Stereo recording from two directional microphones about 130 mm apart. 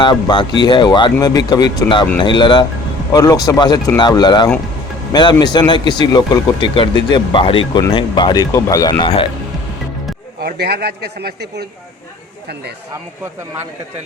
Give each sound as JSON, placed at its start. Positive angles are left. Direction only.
{"t": 0.0, "sound": "speech", "side_deg": 35}